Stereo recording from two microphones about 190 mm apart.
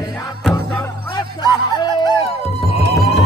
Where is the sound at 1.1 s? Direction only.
20° left (ahead or behind).